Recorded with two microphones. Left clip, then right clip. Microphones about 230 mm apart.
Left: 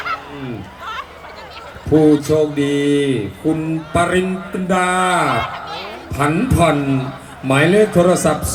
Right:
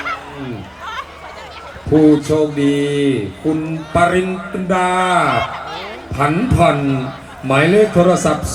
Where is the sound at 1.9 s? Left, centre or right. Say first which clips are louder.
Right 1 dB; left.